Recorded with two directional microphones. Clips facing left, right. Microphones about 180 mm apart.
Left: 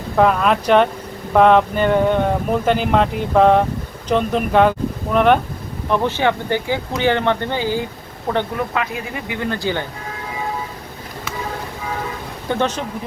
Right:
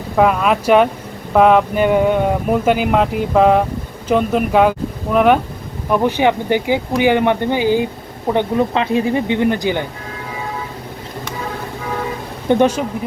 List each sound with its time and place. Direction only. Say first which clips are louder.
0.2 s speech: right 1 dB; 5° right (ahead or behind)
12.5 s speech: right 7 dB; 10° right (ahead or behind)